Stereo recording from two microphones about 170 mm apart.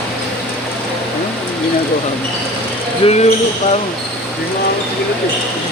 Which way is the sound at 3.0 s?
35° left (ahead or behind).